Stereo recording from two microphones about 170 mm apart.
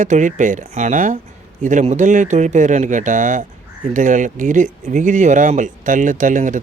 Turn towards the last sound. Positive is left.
turn(degrees=-50)  # may be behind; listen again after turning